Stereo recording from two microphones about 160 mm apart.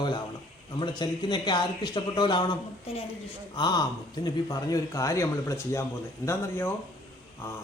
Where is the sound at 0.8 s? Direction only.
30° left (ahead or behind).